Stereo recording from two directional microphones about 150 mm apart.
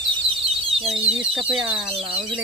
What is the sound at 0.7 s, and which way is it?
Speech, centre (ahead or behind).